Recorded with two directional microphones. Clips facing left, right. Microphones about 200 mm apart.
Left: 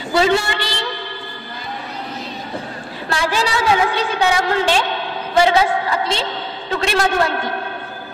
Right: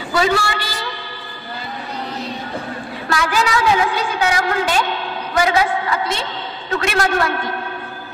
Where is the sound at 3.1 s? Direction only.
30° left (ahead or behind).